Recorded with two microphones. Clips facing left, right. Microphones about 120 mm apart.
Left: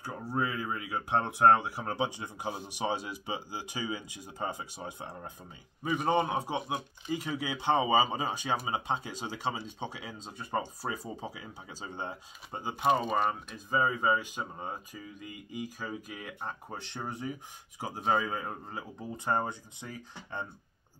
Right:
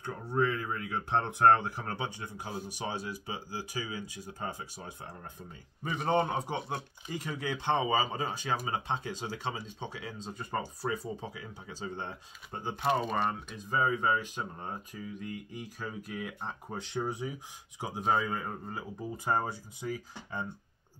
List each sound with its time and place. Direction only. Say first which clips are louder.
0.0 s speech: right 3 dB; 5° left (ahead or behind)
5.9 s speech: left 1 dB; 10° left (ahead or behind)
7.7 s speech: left 3 dB; 20° left (ahead or behind)
10.9 s speech: right 2 dB; 15° left (ahead or behind); by 20.4 s 5° right (ahead or behind)